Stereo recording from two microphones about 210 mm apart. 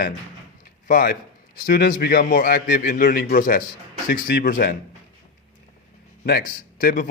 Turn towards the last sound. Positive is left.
turn(degrees=40)  # may be behind; listen again after turning